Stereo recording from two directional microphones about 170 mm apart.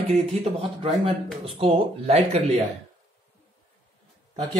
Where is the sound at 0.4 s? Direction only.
35° right (ahead or behind).